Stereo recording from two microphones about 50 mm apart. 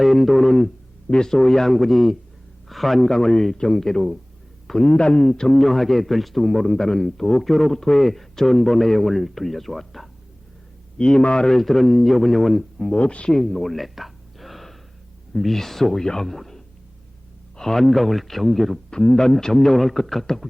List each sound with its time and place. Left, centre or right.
0.0 s a man's voice: centre
5.5 s a man's voice: centre
10.9 s a man's voice: centre
11.4 s a man's voice: centre
12.8 s a man's voice: centre
13.3 s a sound: centre
15.3 s a man's voice: centre
18.9 s speech: centre